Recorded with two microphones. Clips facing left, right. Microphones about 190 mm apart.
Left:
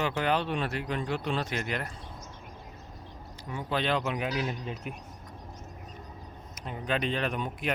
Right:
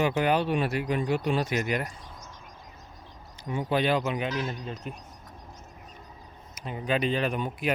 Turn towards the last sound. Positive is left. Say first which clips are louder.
# right 3 dB
turn(degrees=-5)  # may be behind; listen again after turning